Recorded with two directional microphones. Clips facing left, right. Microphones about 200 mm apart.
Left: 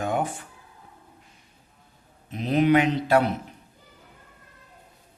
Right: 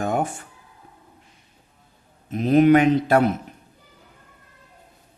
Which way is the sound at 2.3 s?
50° right (ahead or behind).